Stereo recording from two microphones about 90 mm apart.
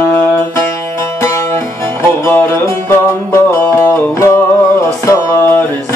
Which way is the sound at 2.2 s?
30° left (ahead or behind).